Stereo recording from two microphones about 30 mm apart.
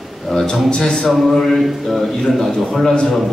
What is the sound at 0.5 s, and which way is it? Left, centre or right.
Speech, left.